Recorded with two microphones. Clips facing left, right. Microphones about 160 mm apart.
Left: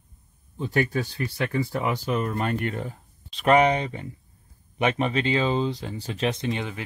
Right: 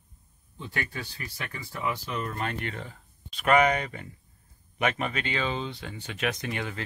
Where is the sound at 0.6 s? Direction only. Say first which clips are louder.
Left 11 dB; 40° left (ahead or behind).